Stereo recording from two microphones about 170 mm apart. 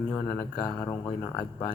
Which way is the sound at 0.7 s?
25° left (ahead or behind).